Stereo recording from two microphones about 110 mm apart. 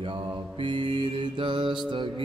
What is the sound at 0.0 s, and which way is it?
Mantra, 50° right (ahead or behind).